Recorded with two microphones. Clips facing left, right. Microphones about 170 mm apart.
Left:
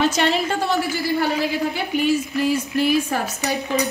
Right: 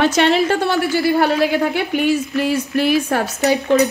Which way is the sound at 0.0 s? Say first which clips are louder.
Right 5 dB; 65° right (ahead or behind).